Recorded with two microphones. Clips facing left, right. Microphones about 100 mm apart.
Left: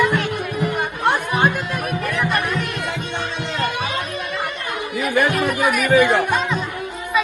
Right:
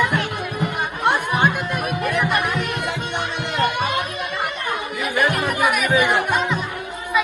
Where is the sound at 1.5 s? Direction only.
15° right (ahead or behind).